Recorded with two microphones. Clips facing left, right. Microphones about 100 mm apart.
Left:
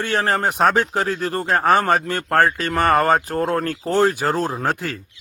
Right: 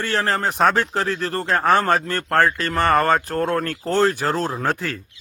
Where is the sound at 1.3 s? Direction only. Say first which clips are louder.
Left 1 dB; 10° left (ahead or behind).